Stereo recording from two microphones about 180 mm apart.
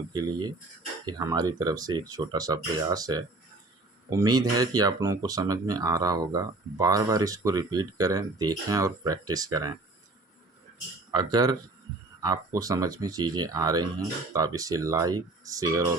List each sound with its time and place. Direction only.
0.1 s speech: 25° right (ahead or behind)
11.1 s speech: 25° right (ahead or behind)